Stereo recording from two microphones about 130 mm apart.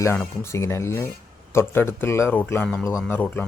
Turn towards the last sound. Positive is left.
turn(degrees=15)  # may be behind; listen again after turning